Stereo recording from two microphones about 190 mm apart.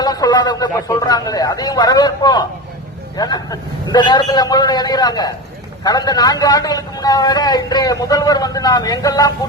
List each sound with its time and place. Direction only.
0.0 s a man's voice: 20° left (ahead or behind)